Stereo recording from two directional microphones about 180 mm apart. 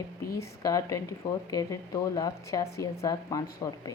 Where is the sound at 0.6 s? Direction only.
20° left (ahead or behind).